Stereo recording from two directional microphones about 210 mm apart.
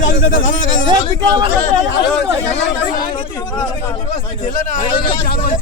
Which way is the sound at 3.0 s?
20° left (ahead or behind).